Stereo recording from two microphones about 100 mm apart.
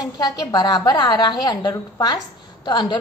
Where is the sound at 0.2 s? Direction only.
40° left (ahead or behind).